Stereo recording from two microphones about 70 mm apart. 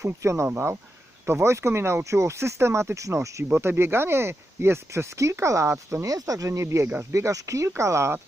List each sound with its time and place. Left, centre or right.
0.0 s speech: right